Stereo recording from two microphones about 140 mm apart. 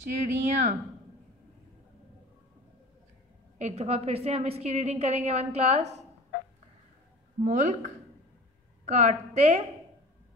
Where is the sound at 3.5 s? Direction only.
50° right (ahead or behind).